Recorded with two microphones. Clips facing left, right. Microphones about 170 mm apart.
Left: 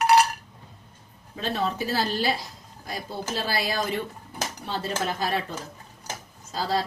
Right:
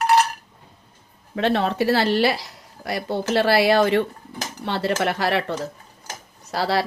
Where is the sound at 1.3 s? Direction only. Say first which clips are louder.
Right 7 dB; 70° right (ahead or behind).